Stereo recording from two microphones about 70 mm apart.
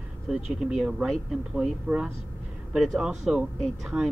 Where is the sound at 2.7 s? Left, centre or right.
Centre.